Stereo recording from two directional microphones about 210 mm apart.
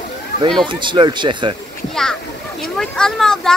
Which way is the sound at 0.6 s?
20° right (ahead or behind).